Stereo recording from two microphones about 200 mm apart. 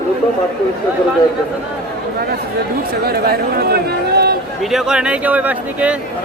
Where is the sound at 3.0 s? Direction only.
50° right (ahead or behind).